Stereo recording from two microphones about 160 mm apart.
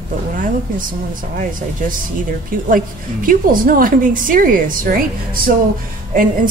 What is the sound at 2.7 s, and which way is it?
A woman's voice, 60° right (ahead or behind).